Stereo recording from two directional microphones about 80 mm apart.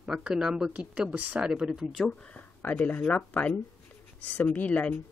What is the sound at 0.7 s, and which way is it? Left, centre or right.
Speech, centre.